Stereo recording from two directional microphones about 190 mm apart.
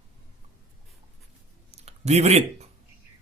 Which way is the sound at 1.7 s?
35° right (ahead or behind).